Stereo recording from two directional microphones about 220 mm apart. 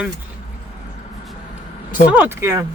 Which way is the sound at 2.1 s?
10° right (ahead or behind).